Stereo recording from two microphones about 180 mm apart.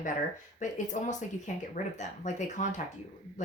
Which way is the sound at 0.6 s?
40° left (ahead or behind).